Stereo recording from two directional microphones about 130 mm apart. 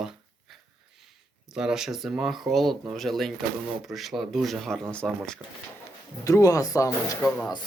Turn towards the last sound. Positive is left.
turn(degrees=10)  # may be behind; listen again after turning